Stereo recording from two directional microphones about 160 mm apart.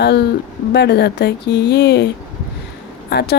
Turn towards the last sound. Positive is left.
turn(degrees=90)